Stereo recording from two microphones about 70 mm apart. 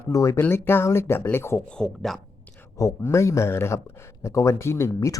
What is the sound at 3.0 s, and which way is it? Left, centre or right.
Speech, left.